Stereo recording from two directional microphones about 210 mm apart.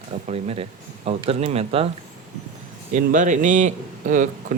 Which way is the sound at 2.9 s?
35° right (ahead or behind).